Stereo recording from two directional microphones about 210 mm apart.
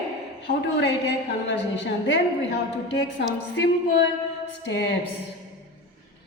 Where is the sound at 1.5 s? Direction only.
55° left (ahead or behind).